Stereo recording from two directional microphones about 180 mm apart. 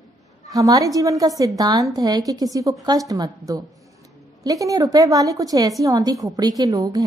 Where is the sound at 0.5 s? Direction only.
20° right (ahead or behind).